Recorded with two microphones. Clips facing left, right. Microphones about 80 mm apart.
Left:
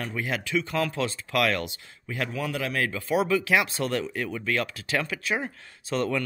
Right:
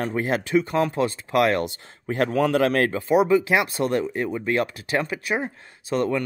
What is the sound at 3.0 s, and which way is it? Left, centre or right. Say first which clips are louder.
Speech: right 5 dB; right.